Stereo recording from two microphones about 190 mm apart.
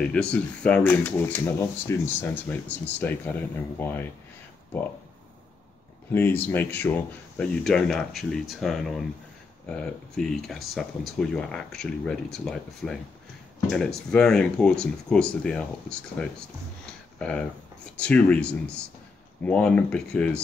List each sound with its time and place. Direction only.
0.0 s speech: 5° left (ahead or behind)
6.1 s speech: 10° left (ahead or behind)